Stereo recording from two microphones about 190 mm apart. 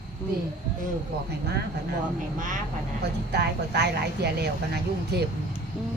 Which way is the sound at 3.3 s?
60° right (ahead or behind).